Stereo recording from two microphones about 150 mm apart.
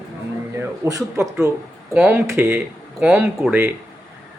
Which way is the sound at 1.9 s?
5° right (ahead or behind).